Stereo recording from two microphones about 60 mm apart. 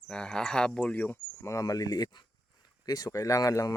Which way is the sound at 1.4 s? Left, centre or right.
Left.